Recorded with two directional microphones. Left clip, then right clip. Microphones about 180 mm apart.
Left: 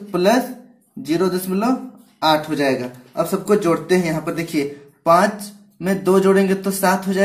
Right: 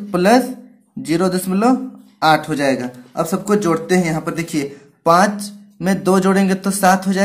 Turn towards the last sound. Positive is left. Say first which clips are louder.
# right 3 dB
turn(degrees=-35)  # may be behind; listen again after turning